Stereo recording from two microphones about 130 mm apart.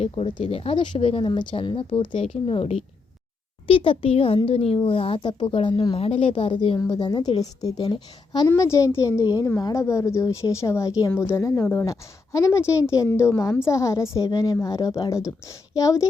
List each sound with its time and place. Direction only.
0.0 s a woman's voice: 45° left (ahead or behind)
8.4 s a woman's voice: 20° left (ahead or behind)